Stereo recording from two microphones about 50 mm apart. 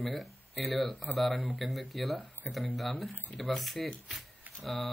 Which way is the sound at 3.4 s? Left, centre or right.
Centre.